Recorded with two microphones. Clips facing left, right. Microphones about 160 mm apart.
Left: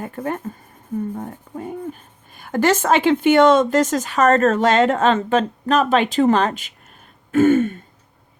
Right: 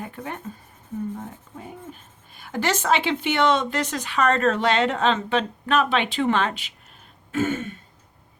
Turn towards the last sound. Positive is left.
turn(degrees=50)  # may be behind; listen again after turning